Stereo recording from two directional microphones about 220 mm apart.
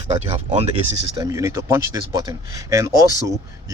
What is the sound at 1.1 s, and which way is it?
Speech, 15° right (ahead or behind).